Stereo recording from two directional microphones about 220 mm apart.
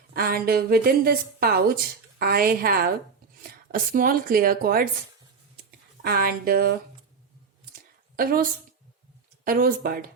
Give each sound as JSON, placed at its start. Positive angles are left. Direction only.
{"t": 0.1, "sound": "a woman's voice", "side_deg": -45}
{"t": 6.0, "sound": "a woman's voice", "side_deg": -45}
{"t": 8.1, "sound": "a woman's voice", "side_deg": -40}